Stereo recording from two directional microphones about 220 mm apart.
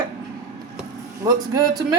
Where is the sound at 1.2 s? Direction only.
15° right (ahead or behind).